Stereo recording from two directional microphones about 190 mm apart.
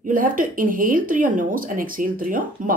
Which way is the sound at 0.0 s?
45° right (ahead or behind).